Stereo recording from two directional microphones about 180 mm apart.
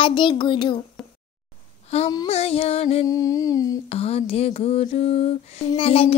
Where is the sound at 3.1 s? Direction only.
20° left (ahead or behind).